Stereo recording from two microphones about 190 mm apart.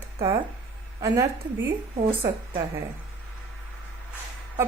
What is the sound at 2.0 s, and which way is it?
Speech, 25° right (ahead or behind).